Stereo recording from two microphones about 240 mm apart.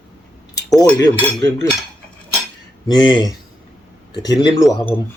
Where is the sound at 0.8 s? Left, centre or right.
Centre.